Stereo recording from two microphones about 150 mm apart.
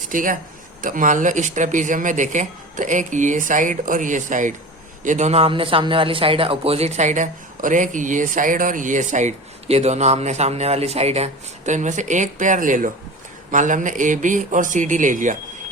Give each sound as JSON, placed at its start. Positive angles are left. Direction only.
{"t": 0.1, "sound": "a man's voice", "side_deg": -65}